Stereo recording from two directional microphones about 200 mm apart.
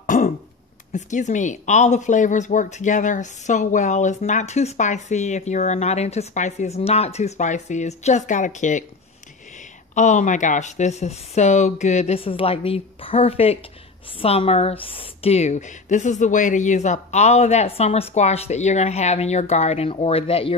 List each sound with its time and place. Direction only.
0.0 s throat clearing: 40° left (ahead or behind)
0.9 s a woman's voice: 40° left (ahead or behind)